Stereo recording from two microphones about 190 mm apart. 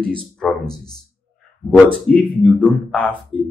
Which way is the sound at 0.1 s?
5° left (ahead or behind).